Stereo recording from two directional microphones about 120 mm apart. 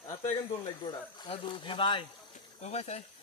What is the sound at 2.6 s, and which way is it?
Speech, 65° left (ahead or behind).